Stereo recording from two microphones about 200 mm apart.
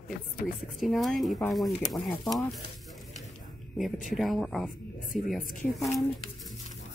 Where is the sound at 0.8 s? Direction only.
Centre (ahead or behind).